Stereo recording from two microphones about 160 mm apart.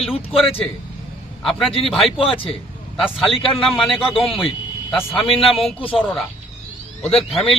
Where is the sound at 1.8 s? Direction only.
Centre (ahead or behind).